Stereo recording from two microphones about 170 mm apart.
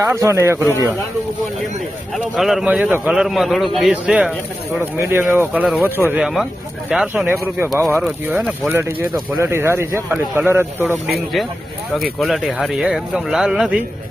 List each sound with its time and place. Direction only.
0.0 s speech: 15° right (ahead or behind)
2.1 s speech: centre (ahead or behind)
12.2 s speech: 5° right (ahead or behind)